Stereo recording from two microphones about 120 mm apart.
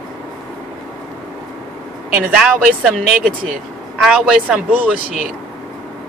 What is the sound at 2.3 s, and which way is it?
Speech, 5° right (ahead or behind).